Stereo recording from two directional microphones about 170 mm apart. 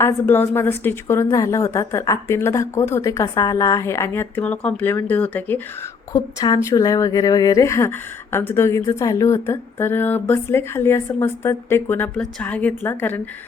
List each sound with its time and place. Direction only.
0.0 s speech: 10° left (ahead or behind)
6.1 s speech: 20° left (ahead or behind)